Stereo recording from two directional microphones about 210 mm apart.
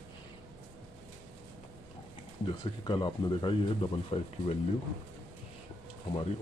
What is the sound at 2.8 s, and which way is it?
Speech, 20° left (ahead or behind).